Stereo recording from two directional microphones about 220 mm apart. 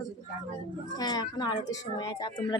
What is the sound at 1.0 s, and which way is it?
Speech, 20° left (ahead or behind).